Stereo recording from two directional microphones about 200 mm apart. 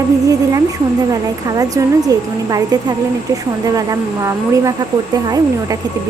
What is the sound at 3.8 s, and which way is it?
A woman's voice, 15° right (ahead or behind).